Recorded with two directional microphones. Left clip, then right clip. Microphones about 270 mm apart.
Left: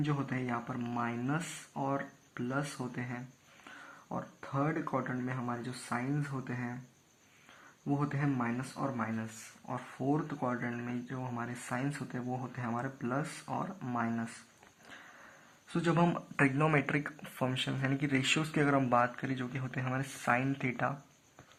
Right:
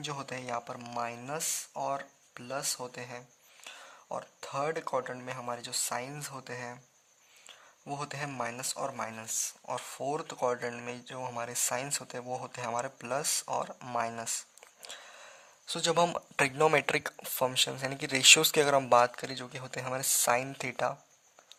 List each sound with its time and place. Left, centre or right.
0.0 s speech: right
4.5 s speech: right
7.9 s speech: right
15.7 s speech: right